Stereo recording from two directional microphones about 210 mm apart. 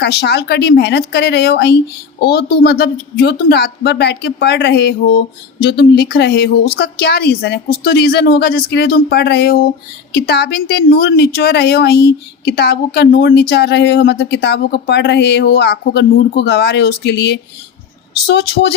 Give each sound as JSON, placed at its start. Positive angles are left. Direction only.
{"t": 0.0, "sound": "a woman's voice", "side_deg": 55}